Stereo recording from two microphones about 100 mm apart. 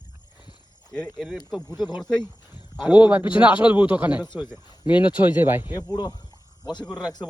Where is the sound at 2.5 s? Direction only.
45° left (ahead or behind).